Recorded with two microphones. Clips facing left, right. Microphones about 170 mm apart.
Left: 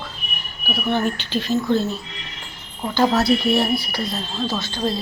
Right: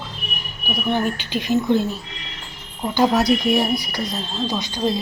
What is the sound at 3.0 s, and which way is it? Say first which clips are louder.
A woman's voice: even; 15° right (ahead or behind).